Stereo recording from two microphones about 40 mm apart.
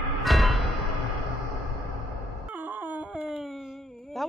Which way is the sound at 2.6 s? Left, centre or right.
Right.